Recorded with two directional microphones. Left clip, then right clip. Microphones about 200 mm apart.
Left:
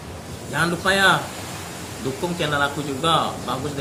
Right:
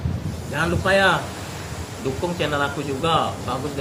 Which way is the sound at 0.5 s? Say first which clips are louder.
Right 1 dB; 20° left (ahead or behind).